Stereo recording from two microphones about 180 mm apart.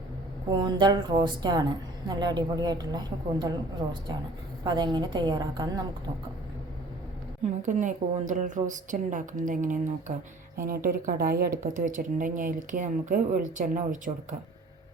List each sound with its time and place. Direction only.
0.6 s a woman's voice: 25° right (ahead or behind)
7.6 s speech: 45° right (ahead or behind)
10.8 s speech: 55° right (ahead or behind)